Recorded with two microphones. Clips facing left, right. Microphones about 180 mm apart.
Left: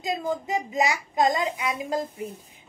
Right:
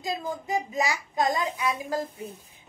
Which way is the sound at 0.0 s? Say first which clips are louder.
Left 4 dB; 20° left (ahead or behind).